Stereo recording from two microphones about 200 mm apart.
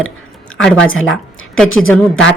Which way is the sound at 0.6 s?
5° left (ahead or behind).